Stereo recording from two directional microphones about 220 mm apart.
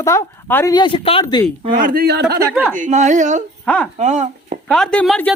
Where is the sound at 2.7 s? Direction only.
35° right (ahead or behind).